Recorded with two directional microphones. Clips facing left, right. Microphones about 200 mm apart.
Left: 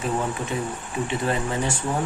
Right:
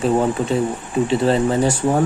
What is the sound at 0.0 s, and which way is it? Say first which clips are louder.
Speech: right 9 dB; 30° right (ahead or behind).